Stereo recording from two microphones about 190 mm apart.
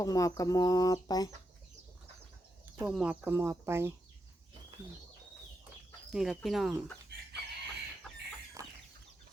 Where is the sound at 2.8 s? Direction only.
5° right (ahead or behind).